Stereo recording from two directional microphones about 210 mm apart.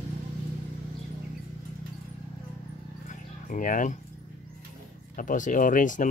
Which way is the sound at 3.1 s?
40° left (ahead or behind).